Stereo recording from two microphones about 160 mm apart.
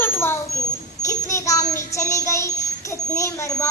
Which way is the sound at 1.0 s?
20° left (ahead or behind).